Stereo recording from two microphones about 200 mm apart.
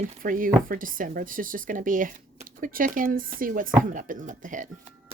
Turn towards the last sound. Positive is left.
turn(degrees=-40)  # may be behind; listen again after turning